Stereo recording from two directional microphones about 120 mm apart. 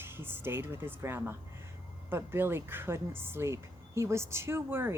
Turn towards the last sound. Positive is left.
turn(degrees=-20)  # may be behind; listen again after turning